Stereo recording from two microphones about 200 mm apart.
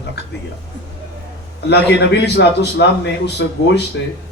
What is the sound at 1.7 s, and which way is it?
A man's voice, 55° left (ahead or behind).